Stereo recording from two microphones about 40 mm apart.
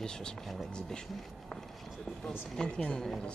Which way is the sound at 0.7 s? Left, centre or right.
Centre.